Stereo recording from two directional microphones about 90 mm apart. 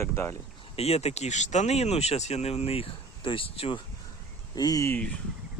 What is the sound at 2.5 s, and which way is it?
Speech, 90° left.